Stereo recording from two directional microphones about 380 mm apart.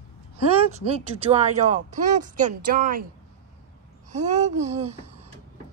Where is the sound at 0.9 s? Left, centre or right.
Centre.